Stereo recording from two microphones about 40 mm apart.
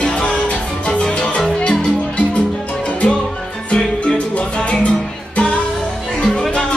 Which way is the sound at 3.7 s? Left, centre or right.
Left.